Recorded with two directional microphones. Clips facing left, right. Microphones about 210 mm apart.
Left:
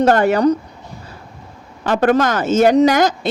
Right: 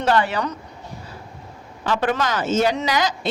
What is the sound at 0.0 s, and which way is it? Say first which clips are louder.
Speech: left 8 dB; 45° left (ahead or behind).